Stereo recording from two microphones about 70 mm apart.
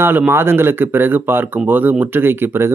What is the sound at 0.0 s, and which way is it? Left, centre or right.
Speech, right.